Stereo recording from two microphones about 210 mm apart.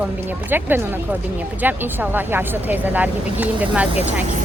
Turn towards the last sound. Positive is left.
turn(degrees=-5)  # may be behind; listen again after turning